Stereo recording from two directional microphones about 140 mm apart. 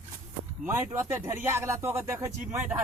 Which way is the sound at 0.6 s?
20° right (ahead or behind).